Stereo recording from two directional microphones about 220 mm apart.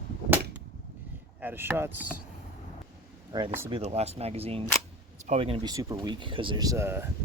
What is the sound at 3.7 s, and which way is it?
Speech, 30° right (ahead or behind).